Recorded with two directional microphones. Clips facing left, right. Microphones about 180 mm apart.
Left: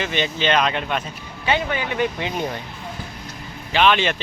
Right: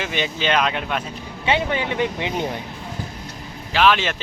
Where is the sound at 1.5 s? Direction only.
25° right (ahead or behind).